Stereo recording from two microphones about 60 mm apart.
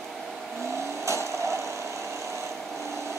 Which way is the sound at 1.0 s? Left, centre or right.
Right.